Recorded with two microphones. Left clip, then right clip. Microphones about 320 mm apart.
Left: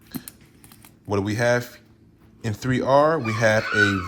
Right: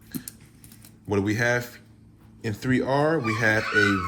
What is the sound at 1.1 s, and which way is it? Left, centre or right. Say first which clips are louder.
Speech: left 2 dB; centre.